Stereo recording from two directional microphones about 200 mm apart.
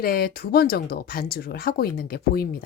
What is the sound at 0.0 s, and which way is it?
Speech, 50° left (ahead or behind).